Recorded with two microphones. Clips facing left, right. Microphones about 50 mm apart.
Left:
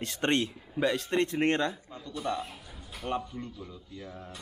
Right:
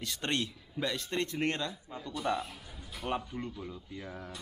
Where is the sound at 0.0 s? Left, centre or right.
Left.